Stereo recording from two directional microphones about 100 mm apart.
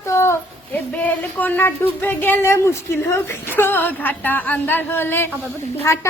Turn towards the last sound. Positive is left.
turn(degrees=30)  # may be behind; listen again after turning